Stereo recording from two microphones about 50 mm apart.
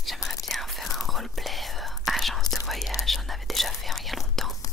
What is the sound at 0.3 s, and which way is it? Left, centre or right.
Whispering, centre.